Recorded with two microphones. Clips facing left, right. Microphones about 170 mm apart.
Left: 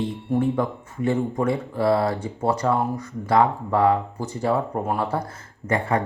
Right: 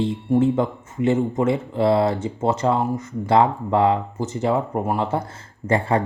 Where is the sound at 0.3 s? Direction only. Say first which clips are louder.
Right 3 dB; 25° right (ahead or behind).